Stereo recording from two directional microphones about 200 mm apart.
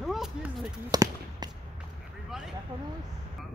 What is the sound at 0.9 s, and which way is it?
Speech, 20° right (ahead or behind).